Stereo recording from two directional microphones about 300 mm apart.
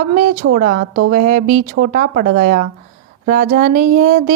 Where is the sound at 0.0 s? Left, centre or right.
Right.